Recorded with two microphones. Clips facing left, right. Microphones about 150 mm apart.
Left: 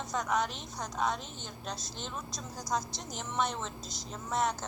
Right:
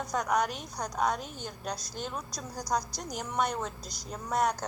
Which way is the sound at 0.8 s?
45° right (ahead or behind).